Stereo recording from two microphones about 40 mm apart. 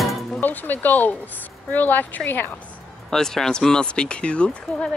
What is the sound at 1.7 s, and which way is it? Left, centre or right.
Speech, left.